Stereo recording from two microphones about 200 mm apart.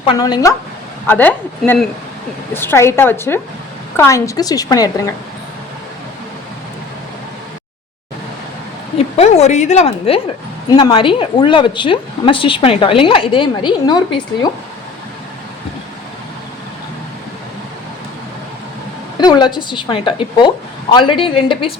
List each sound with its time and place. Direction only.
0.1 s a woman's voice: 20° left (ahead or behind)
1.0 s a woman's voice: 10° left (ahead or behind)
9.1 s a woman's voice: 35° left (ahead or behind)
19.1 s a woman's voice: 20° left (ahead or behind)